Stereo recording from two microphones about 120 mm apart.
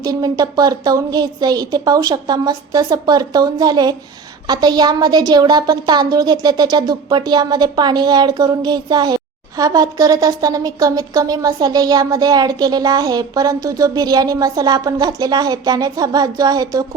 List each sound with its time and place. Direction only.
0.0 s a woman's voice: 30° right (ahead or behind)